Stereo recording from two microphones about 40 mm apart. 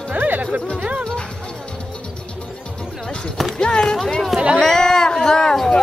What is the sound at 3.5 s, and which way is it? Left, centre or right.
Speech, left.